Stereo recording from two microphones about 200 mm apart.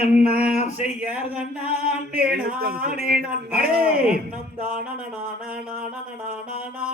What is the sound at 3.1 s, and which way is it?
Speech, 5° right (ahead or behind).